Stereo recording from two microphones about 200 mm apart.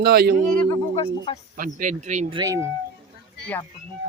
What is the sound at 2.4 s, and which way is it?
Speech, 15° right (ahead or behind).